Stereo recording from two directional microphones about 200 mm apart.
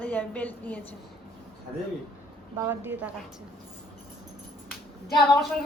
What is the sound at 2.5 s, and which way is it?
Speech, 10° right (ahead or behind).